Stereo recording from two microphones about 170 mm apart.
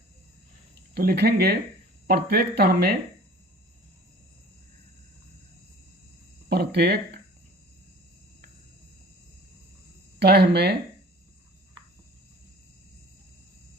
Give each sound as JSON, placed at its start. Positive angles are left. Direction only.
{"t": 0.9, "sound": "speech", "side_deg": -70}
{"t": 6.5, "sound": "speech", "side_deg": -70}
{"t": 10.2, "sound": "speech", "side_deg": -75}